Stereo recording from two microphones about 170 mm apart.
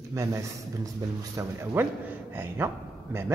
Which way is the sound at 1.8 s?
10° right (ahead or behind).